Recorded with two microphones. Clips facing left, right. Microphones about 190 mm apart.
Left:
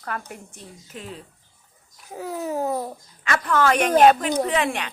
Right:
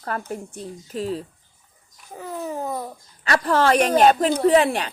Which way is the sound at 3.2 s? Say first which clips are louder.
Right 2 dB; 35° right (ahead or behind).